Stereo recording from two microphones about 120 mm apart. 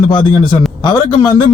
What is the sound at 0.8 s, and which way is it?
Speech, 40° left (ahead or behind).